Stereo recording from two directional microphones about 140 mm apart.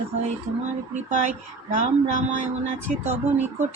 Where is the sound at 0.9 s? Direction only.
60° right (ahead or behind).